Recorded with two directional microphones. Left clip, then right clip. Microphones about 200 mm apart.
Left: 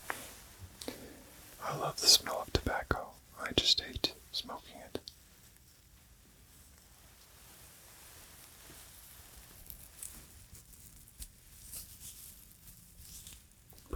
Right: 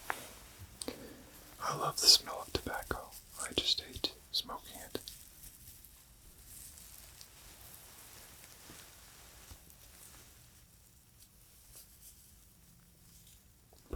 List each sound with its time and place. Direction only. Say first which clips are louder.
0.8 s a sound: even; 5° right (ahead or behind)
2.2 s whispering: left 4 dB; 30° left (ahead or behind)
4.3 s whispering: right 2 dB; 10° left (ahead or behind)